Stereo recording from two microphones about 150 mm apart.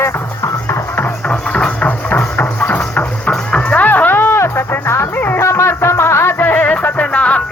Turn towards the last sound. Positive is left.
turn(degrees=10)  # may be behind; listen again after turning